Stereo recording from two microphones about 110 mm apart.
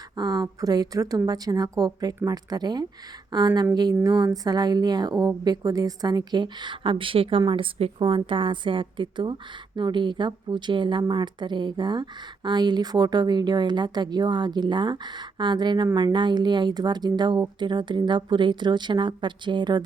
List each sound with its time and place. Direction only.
0.2 s a woman's voice: 35° right (ahead or behind)